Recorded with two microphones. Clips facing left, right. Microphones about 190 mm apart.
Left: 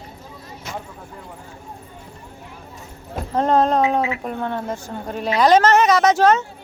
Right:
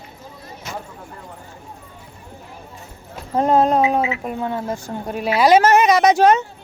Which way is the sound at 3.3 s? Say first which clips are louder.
Right 1 dB; 10° right (ahead or behind).